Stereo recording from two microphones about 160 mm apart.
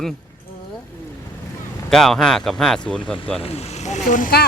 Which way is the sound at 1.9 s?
5° left (ahead or behind).